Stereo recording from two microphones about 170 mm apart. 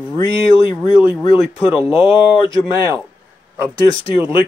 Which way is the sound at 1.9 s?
30° left (ahead or behind).